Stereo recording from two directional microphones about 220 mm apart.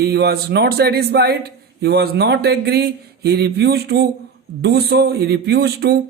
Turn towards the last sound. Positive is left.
turn(degrees=-45)  # may be behind; listen again after turning